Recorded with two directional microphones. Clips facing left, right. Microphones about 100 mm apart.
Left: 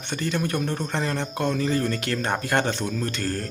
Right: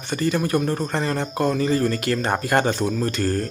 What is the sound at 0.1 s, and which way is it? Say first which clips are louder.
Speech: right 5 dB; 5° right (ahead or behind).